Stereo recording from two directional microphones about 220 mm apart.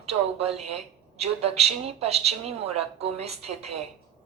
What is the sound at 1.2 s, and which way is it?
Speech, 30° right (ahead or behind).